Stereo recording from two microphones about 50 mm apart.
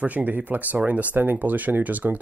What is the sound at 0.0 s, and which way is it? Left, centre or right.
Speech, right.